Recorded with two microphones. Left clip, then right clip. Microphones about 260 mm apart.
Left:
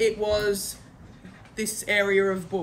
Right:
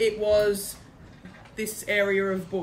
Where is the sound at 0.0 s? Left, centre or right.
Centre.